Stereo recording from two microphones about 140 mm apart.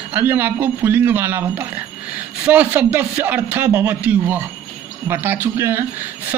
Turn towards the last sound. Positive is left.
turn(degrees=-15)  # may be behind; listen again after turning